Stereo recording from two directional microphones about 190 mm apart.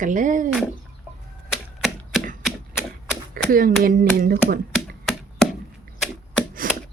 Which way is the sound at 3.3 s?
50° right (ahead or behind).